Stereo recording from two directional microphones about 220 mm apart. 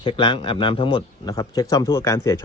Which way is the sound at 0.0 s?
20° left (ahead or behind).